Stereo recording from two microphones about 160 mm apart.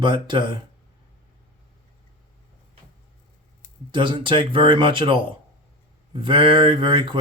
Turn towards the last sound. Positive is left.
turn(degrees=-30)  # may be behind; listen again after turning